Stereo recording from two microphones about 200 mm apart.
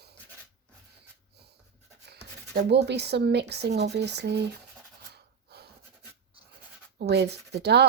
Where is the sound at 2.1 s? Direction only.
55° right (ahead or behind).